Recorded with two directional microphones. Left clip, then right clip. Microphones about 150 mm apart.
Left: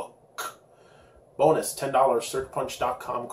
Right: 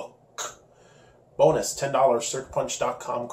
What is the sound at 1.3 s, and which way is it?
Speech, 15° right (ahead or behind).